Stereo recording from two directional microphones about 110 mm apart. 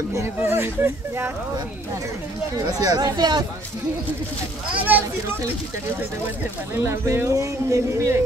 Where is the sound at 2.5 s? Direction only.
35° right (ahead or behind).